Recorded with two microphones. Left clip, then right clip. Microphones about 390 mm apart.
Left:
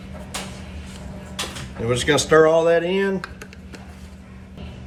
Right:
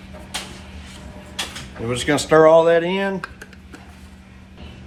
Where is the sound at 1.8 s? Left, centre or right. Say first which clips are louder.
Left 1 dB; centre.